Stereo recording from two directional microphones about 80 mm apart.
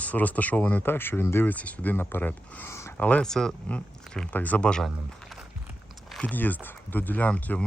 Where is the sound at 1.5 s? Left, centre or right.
Centre.